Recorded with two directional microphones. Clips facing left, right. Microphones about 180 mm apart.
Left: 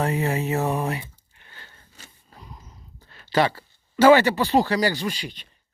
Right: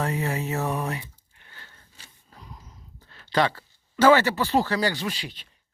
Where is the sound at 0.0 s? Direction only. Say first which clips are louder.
Left 3 dB; 20° left (ahead or behind).